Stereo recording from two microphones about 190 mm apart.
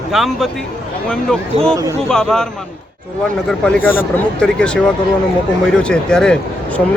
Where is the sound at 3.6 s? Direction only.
5° left (ahead or behind).